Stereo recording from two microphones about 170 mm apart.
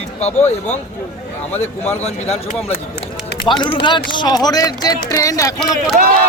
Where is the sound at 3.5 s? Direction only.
30° left (ahead or behind).